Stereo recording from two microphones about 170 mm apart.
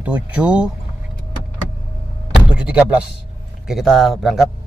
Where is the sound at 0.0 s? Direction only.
10° right (ahead or behind).